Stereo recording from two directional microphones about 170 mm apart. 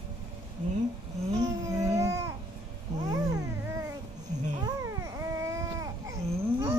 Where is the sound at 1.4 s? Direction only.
20° right (ahead or behind).